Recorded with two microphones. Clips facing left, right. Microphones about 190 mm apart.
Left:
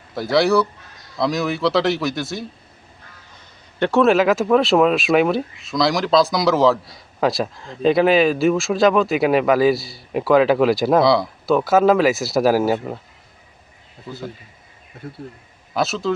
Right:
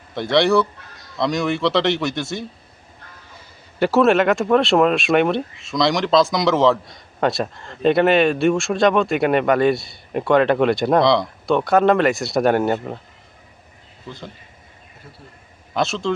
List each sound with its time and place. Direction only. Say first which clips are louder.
0.1 s speech: even; centre (ahead or behind)
3.8 s speech: even; 5° right (ahead or behind)
15.0 s speech: left 11 dB; 60° left (ahead or behind)
15.7 s speech: even; 5° left (ahead or behind)